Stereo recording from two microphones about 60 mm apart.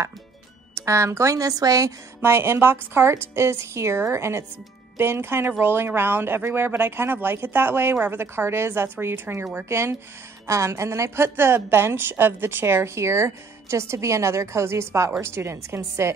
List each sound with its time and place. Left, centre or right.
0.7 s speech: right
2.2 s a woman's voice: right
10.4 s a woman's voice: right